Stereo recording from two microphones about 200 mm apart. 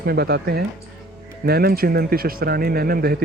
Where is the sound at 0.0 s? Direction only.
50° right (ahead or behind).